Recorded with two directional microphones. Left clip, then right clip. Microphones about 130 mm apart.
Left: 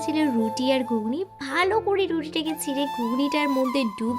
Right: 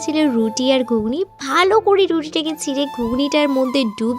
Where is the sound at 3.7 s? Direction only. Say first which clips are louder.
Right 6 dB; 50° right (ahead or behind).